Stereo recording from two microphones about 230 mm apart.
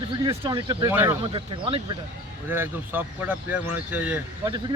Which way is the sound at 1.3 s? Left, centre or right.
Right.